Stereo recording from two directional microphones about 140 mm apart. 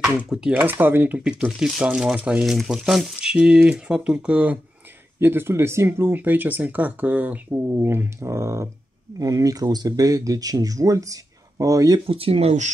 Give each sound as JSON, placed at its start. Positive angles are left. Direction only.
{"t": 0.0, "sound": "speech", "side_deg": -5}
{"t": 12.1, "sound": "speech", "side_deg": -45}